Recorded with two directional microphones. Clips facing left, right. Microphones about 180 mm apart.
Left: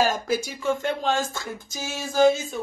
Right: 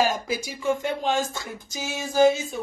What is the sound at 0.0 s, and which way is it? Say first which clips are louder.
Speech: left 1 dB; 10° right (ahead or behind).